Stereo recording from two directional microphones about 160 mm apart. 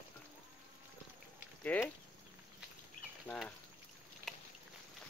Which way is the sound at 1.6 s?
10° left (ahead or behind).